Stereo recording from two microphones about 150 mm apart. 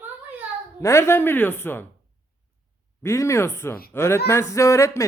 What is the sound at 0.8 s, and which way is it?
A man's voice, 20° left (ahead or behind).